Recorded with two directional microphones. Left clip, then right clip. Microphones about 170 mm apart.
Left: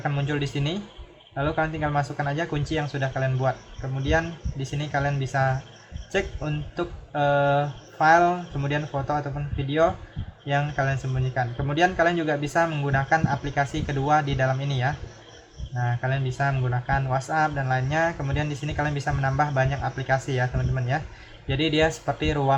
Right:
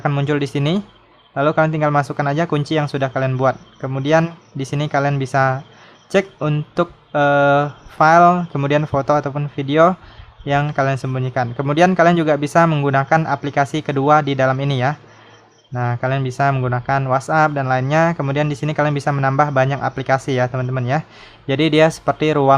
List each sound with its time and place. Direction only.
0.0 s speech: 45° right (ahead or behind)